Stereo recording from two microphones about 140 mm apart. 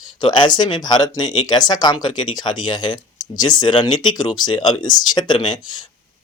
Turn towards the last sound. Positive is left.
turn(degrees=30)  # may be behind; listen again after turning